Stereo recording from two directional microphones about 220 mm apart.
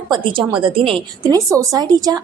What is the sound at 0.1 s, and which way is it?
A woman's voice, 25° right (ahead or behind).